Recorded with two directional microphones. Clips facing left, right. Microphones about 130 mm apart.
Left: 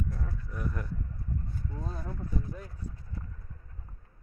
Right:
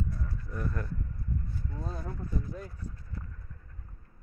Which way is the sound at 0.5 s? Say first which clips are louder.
Right 2 dB; 10° left (ahead or behind).